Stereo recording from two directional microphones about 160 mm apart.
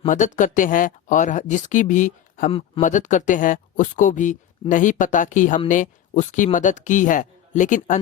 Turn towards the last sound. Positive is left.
turn(degrees=50)  # may be behind; listen again after turning